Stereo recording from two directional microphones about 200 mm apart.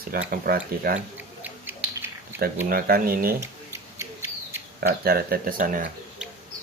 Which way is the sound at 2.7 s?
50° right (ahead or behind).